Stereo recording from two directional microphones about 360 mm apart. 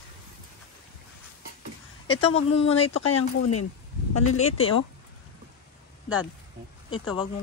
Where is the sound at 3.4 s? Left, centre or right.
Left.